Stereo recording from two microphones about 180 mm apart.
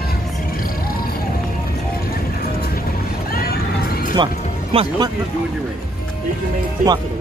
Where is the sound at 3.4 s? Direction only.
55° left (ahead or behind).